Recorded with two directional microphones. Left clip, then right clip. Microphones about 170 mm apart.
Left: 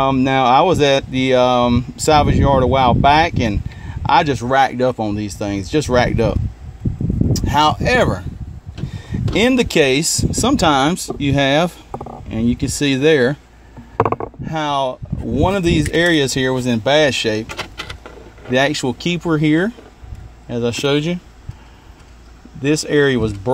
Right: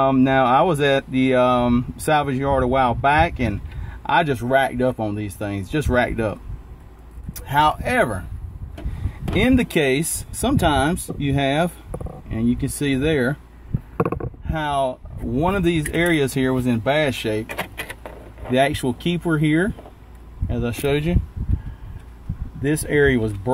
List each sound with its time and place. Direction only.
0.0 s speech: 40° left (ahead or behind)
9.3 s speech: 40° left (ahead or behind)
14.5 s speech: 35° left (ahead or behind)
18.5 s speech: 35° left (ahead or behind)
22.6 s speech: 30° left (ahead or behind)